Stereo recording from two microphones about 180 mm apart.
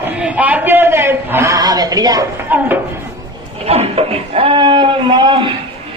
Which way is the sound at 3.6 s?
35° right (ahead or behind).